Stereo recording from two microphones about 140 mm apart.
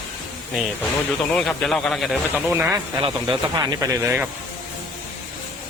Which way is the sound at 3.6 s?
25° right (ahead or behind).